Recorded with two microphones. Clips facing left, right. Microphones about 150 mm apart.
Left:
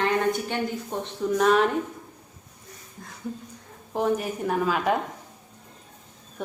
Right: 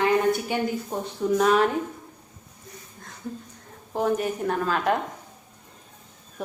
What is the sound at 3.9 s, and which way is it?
A woman's voice, centre (ahead or behind).